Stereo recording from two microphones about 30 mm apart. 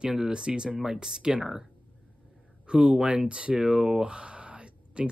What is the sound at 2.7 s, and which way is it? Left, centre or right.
Speech, right.